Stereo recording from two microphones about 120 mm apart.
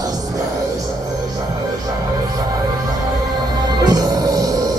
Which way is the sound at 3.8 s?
30° right (ahead or behind).